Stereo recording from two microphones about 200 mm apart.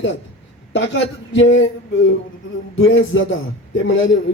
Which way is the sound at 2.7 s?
75° left (ahead or behind).